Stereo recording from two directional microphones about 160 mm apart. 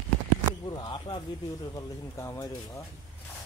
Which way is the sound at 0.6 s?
25° left (ahead or behind).